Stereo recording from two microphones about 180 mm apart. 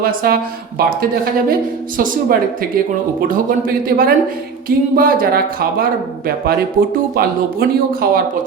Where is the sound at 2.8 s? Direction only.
50° right (ahead or behind).